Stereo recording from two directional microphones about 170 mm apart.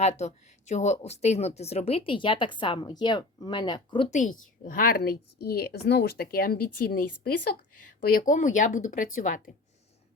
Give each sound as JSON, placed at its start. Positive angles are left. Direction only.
{"t": 0.0, "sound": "speech", "side_deg": 40}
{"t": 4.1, "sound": "a woman's voice", "side_deg": 45}